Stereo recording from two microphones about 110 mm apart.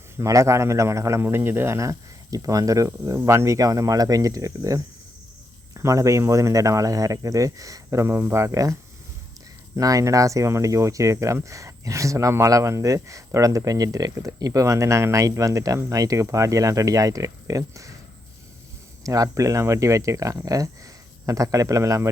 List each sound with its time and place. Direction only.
0.2 s speech: 25° right (ahead or behind)
19.0 s a man's voice: 30° right (ahead or behind)